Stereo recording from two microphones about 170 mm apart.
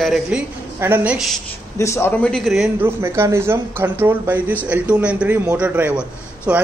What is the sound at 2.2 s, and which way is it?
Speech, centre (ahead or behind).